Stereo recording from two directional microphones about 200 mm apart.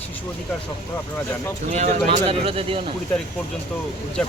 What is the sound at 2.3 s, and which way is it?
Speech, 30° right (ahead or behind).